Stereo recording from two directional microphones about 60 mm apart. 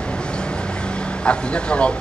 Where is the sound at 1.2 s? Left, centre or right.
Centre.